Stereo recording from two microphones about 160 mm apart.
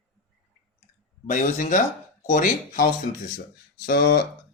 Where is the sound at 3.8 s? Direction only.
90° left.